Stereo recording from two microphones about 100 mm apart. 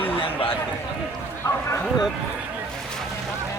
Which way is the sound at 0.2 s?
65° left (ahead or behind).